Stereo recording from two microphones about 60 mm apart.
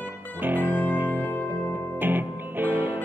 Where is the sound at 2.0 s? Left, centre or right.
Right.